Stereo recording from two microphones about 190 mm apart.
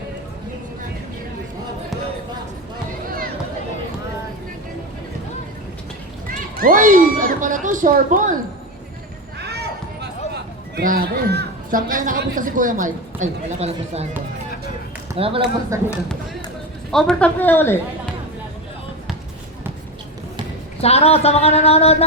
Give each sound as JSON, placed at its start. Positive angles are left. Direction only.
{"t": 6.6, "sound": "speech", "side_deg": -45}
{"t": 9.4, "sound": "a sound", "side_deg": -60}
{"t": 10.8, "sound": "a man's voice", "side_deg": -55}
{"t": 15.1, "sound": "speech", "side_deg": -30}
{"t": 15.7, "sound": "speech", "side_deg": -15}
{"t": 16.9, "sound": "a woman's voice", "side_deg": 5}
{"t": 20.8, "sound": "a sound", "side_deg": 35}